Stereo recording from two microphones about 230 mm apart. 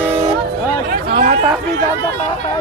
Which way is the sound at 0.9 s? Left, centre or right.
Right.